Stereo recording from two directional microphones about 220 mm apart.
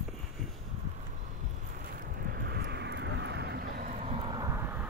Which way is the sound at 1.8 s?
45° right (ahead or behind).